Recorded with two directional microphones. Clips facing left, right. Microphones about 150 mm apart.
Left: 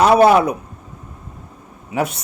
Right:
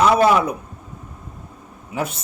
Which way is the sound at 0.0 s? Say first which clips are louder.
Left 4 dB; 65° left (ahead or behind).